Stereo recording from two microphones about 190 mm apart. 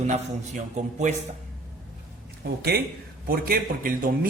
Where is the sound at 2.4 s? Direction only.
55° right (ahead or behind).